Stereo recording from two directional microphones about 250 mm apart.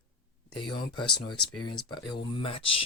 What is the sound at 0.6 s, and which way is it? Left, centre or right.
Speech, centre.